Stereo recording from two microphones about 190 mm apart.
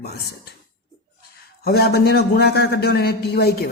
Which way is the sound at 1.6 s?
55° left (ahead or behind).